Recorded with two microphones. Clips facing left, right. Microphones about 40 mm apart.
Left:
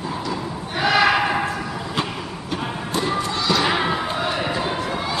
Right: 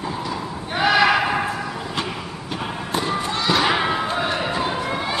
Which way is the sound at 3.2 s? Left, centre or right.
Right.